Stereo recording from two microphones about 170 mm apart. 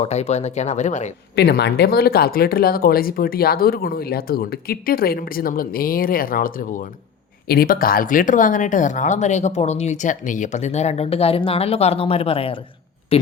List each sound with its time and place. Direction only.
0.0 s speech: 40° left (ahead or behind)
1.4 s speech: 70° left (ahead or behind); by 12.5 s 35° left (ahead or behind)